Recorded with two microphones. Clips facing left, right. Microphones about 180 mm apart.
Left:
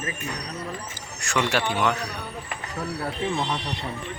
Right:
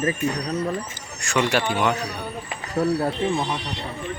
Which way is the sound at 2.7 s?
35° right (ahead or behind).